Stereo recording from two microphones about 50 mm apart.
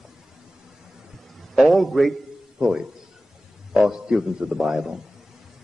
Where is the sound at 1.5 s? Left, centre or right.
Centre.